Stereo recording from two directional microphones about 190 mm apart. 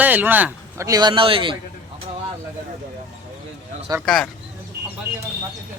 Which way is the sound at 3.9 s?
20° right (ahead or behind).